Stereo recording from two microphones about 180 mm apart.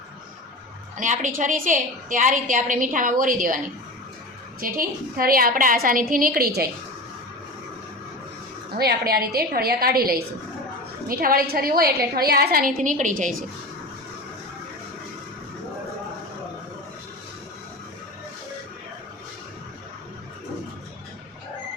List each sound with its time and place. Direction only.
0.9 s a woman's voice: 45° right (ahead or behind)
4.6 s a woman's voice: 50° right (ahead or behind)
8.8 s a woman's voice: 60° right (ahead or behind)
12.8 s a woman's voice: 45° right (ahead or behind)